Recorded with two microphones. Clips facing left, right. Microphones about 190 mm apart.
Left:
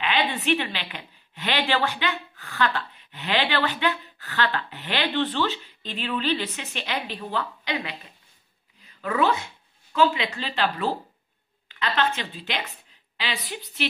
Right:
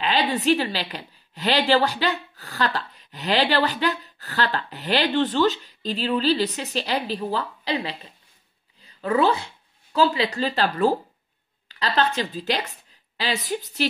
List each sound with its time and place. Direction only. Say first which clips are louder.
0.0 s a woman's voice: right 3 dB; 40° right (ahead or behind)